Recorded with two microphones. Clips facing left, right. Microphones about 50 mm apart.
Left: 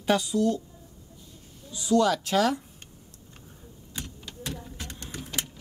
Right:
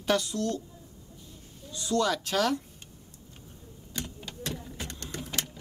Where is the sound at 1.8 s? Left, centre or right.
Centre.